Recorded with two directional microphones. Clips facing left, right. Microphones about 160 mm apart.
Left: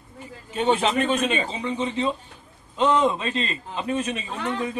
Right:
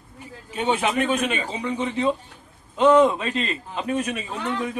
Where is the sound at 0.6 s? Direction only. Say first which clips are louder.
Left 1 dB; 10° right (ahead or behind).